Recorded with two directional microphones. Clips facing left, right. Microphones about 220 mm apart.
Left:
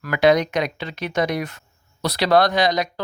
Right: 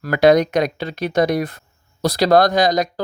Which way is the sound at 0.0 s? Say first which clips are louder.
Right 4 dB; 40° right (ahead or behind).